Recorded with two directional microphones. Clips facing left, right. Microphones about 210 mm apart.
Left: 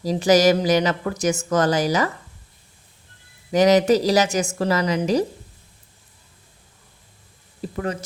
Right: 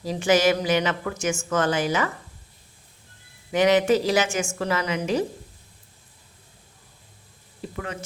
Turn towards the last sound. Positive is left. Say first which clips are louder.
# left 6 dB
turn(degrees=40)  # may be behind; listen again after turning